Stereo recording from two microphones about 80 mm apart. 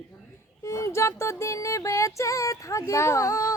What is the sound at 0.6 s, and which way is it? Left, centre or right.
Music, left.